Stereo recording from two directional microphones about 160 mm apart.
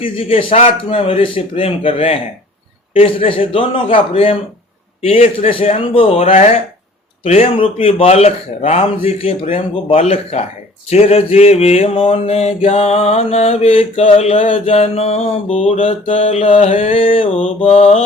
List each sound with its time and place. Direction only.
0.0 s mantra: 35° left (ahead or behind)